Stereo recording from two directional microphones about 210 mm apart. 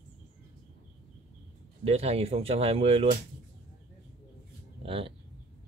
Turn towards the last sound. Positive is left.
turn(degrees=-25)  # may be behind; listen again after turning